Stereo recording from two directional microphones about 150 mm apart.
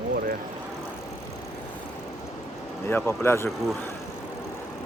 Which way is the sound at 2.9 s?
15° left (ahead or behind).